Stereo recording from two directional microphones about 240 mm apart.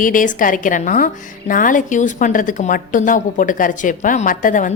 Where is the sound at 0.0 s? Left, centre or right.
Left.